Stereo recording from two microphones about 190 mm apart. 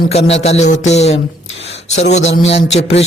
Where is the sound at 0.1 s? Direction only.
35° left (ahead or behind).